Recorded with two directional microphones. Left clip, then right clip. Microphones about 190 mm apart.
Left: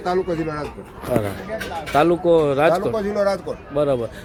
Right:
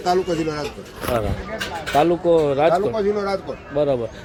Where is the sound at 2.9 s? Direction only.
50° left (ahead or behind).